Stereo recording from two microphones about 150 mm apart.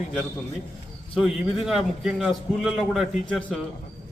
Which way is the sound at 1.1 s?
Centre (ahead or behind).